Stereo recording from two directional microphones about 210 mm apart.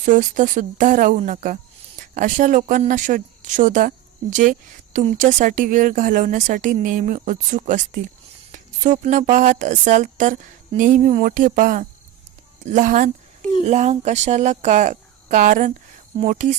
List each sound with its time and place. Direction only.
0.0 s speech: 35° right (ahead or behind)